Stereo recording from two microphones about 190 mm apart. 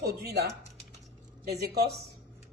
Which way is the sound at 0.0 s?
55° right (ahead or behind).